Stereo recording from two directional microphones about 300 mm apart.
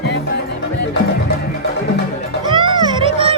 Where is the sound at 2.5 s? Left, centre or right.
Centre.